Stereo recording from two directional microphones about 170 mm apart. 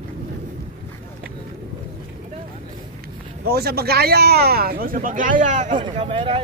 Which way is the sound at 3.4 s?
65° right (ahead or behind).